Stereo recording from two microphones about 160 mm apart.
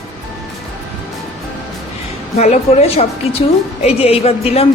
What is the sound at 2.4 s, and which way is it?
A woman's voice, 40° left (ahead or behind).